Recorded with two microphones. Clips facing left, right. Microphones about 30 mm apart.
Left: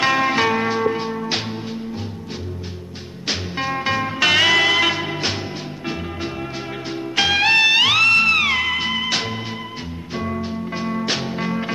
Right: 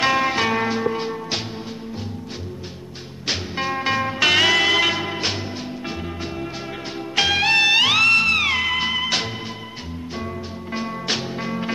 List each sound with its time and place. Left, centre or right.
0.0 s music: centre
1.1 s music: centre
3.3 s music: centre
6.9 s music: centre
10.1 s music: centre
10.7 s music: centre